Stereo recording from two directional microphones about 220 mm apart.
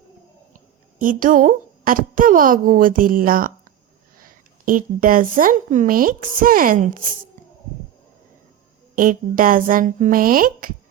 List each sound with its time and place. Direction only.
0.5 s a woman's voice: 35° right (ahead or behind)
9.0 s a woman's voice: 40° right (ahead or behind)